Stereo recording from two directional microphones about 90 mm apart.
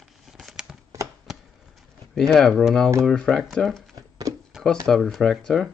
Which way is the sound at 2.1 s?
5° left (ahead or behind).